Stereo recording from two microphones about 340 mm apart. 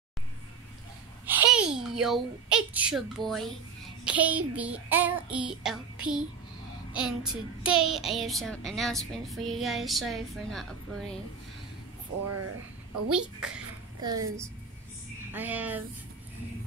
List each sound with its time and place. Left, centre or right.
1.2 s a woman's voice: centre
12.3 s speech: right
13.1 s a child's voice: centre